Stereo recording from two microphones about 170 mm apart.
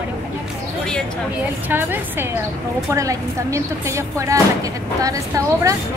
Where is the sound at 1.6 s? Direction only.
10° right (ahead or behind).